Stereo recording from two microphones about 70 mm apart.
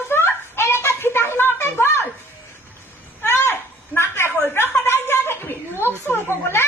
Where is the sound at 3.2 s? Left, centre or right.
Left.